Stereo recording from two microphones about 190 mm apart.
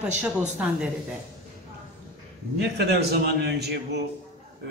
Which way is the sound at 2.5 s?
60° right (ahead or behind).